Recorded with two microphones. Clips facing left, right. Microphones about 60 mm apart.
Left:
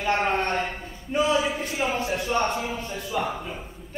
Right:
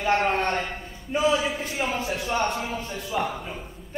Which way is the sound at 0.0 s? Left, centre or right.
Centre.